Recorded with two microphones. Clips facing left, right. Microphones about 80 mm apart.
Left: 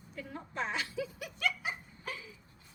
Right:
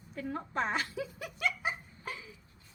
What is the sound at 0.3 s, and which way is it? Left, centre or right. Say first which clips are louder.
Speech: right 3 dB; right.